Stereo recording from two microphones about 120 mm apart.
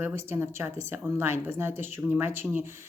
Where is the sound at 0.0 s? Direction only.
20° right (ahead or behind).